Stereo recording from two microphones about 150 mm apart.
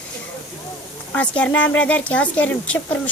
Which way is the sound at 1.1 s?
10° left (ahead or behind).